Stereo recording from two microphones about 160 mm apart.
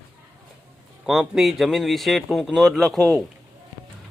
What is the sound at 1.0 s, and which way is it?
Speech, centre (ahead or behind).